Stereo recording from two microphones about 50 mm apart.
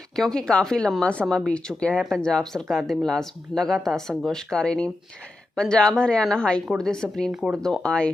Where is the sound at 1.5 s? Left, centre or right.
Left.